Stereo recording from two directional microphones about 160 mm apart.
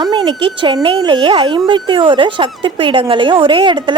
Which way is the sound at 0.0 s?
25° right (ahead or behind).